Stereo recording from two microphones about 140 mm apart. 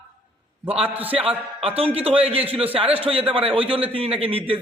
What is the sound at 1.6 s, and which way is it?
A man's voice, 45° right (ahead or behind).